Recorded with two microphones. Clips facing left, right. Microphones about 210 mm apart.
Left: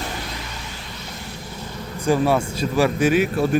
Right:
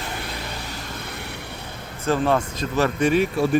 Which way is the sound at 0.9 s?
60° right (ahead or behind).